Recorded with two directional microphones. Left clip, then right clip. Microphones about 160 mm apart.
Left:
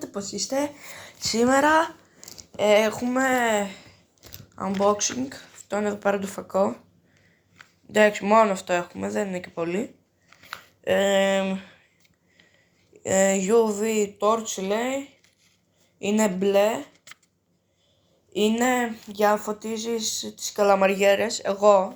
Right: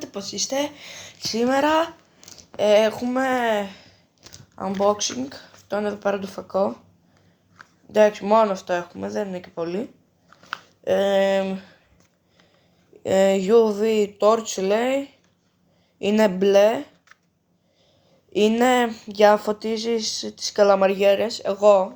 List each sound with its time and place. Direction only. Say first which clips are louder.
0.0 s speech: right 3 dB; centre (ahead or behind)
1.6 s speech: even; 15° right (ahead or behind)
7.9 s speech: right 1 dB; centre (ahead or behind)
13.0 s speech: right 3 dB; 25° right (ahead or behind)
16.0 s speech: right 5 dB; 25° right (ahead or behind)
18.4 s speech: right 4 dB; 25° right (ahead or behind)
19.2 s speech: right 6 dB; 45° right (ahead or behind)
20.6 s speech: right 3 dB; 15° right (ahead or behind)